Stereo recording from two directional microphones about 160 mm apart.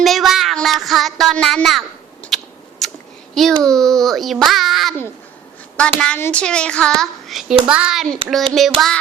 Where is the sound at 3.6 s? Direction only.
5° left (ahead or behind).